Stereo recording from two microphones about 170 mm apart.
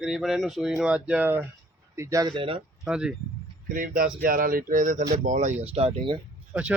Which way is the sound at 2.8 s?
5° right (ahead or behind).